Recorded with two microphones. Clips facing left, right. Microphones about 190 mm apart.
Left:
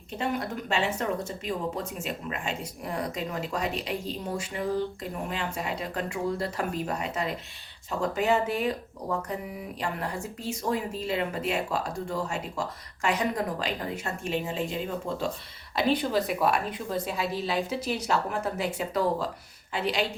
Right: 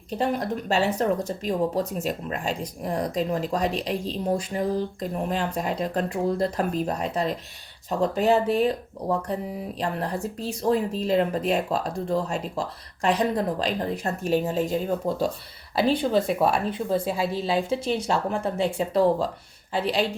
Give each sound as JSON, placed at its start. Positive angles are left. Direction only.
{"t": 0.2, "sound": "speech", "side_deg": -35}
{"t": 9.8, "sound": "a woman's voice", "side_deg": -35}